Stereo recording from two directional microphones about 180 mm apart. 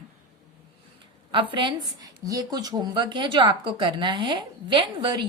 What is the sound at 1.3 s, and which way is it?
A woman's voice, 25° right (ahead or behind).